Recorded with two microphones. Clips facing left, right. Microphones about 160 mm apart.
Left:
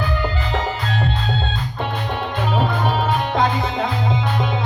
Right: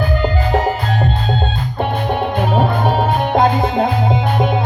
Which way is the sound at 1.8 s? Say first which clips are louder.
Right 7 dB; 50° right (ahead or behind).